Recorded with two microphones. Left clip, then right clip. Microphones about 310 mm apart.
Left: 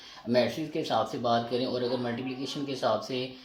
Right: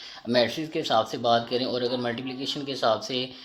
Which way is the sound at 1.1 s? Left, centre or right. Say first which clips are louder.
Right 4 dB; centre.